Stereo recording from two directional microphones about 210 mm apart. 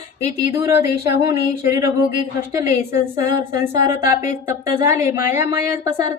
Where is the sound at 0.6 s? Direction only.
15° right (ahead or behind).